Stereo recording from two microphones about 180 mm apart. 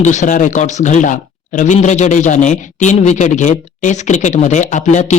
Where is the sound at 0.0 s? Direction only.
40° left (ahead or behind).